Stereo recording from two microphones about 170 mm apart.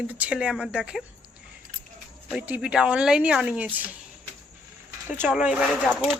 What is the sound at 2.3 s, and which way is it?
Speech, 5° right (ahead or behind).